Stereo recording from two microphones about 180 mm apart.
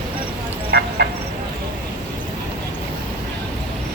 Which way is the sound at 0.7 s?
60° right (ahead or behind).